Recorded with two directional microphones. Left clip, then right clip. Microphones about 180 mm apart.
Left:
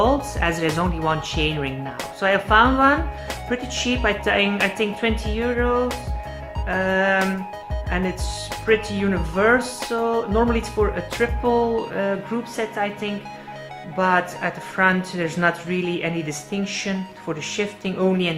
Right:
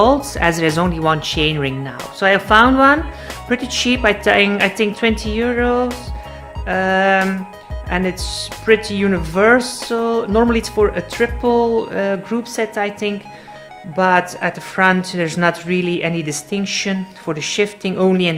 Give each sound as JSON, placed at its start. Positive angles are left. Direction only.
{"t": 0.0, "sound": "speech", "side_deg": -40}